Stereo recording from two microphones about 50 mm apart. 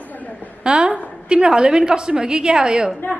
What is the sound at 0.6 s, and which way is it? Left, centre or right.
A woman's voice, centre.